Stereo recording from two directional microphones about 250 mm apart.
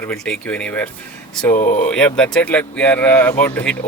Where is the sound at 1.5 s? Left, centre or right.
Left.